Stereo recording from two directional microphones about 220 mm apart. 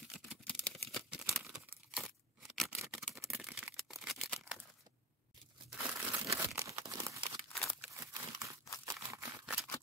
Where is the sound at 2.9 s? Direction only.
Centre (ahead or behind).